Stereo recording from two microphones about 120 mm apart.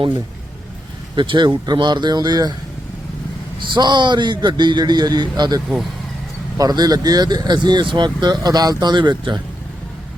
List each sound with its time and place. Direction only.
1.1 s speech: 40° right (ahead or behind)
3.6 s speech: 40° right (ahead or behind)